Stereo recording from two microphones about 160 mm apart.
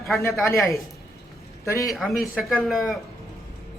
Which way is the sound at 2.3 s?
Centre (ahead or behind).